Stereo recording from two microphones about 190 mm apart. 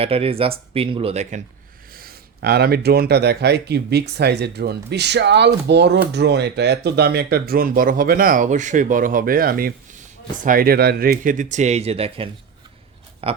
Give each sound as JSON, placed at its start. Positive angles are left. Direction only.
{"t": 0.0, "sound": "speech", "side_deg": -30}
{"t": 1.9, "sound": "speech", "side_deg": -50}
{"t": 13.2, "sound": "a sound", "side_deg": -30}